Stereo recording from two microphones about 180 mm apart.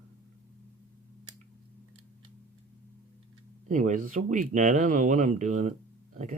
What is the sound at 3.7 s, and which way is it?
Speech, 45° right (ahead or behind).